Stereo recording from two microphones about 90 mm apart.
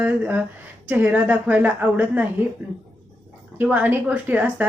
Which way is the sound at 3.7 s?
20° right (ahead or behind).